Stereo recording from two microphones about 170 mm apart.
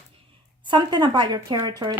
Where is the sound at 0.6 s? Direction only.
25° right (ahead or behind).